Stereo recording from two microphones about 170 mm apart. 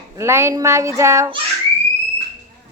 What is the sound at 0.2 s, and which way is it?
A child's voice, 15° right (ahead or behind).